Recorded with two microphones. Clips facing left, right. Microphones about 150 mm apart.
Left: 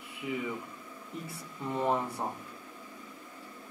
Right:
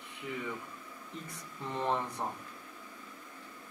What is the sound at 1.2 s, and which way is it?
Speech, 10° left (ahead or behind).